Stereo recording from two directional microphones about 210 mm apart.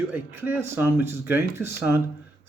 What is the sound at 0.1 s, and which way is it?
Speech, 10° right (ahead or behind).